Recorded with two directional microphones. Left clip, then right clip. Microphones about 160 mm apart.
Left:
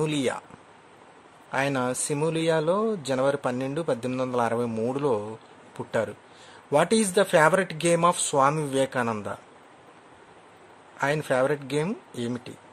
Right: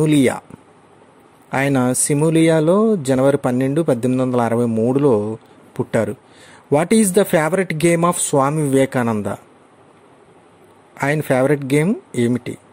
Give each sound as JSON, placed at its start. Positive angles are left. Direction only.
{"t": 0.0, "sound": "speech", "side_deg": -30}
{"t": 1.5, "sound": "speech", "side_deg": -30}
{"t": 11.0, "sound": "speech", "side_deg": -35}